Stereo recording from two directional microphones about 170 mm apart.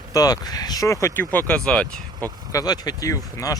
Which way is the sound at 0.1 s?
20° left (ahead or behind).